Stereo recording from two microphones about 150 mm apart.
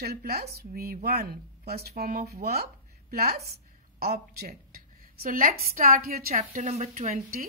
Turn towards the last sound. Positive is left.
turn(degrees=-45)  # may be behind; listen again after turning